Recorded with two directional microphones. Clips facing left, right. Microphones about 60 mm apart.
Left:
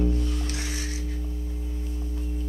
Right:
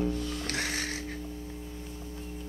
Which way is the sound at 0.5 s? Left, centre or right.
Right.